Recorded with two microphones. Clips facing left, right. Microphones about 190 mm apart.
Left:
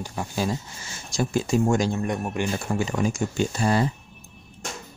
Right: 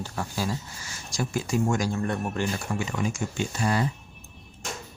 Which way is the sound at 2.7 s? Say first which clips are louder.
Left 4 dB; 35° left (ahead or behind).